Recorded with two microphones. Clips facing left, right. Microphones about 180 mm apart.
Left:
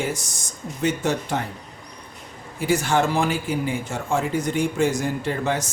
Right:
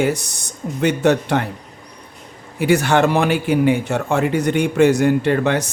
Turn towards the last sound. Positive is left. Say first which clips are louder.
# right 7 dB
turn(degrees=-70)  # may be behind; listen again after turning